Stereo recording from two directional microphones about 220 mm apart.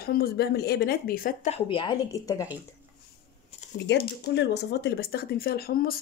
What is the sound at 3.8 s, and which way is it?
Speech, 45° left (ahead or behind).